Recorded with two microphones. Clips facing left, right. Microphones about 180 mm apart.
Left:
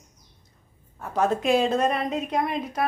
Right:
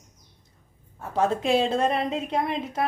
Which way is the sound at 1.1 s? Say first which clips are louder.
Left 1 dB; 25° right (ahead or behind).